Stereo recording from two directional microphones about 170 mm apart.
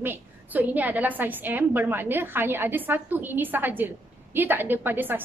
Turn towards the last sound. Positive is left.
turn(degrees=-10)  # may be behind; listen again after turning